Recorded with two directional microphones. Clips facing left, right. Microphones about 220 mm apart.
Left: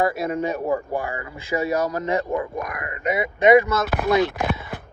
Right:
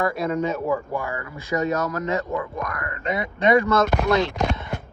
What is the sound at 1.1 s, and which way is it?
Speech, 25° left (ahead or behind).